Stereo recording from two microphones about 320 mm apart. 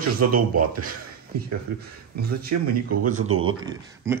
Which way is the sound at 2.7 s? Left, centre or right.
Right.